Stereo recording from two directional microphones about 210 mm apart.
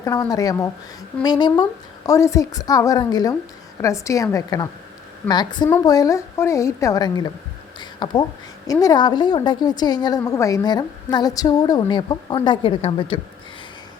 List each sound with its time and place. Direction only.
0.0 s a woman's voice: 15° left (ahead or behind)